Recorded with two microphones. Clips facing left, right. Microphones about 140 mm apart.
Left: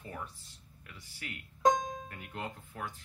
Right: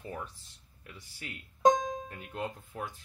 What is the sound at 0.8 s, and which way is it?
Speech, 25° right (ahead or behind).